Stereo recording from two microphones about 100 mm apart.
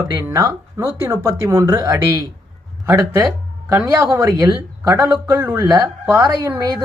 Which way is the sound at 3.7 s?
30° right (ahead or behind).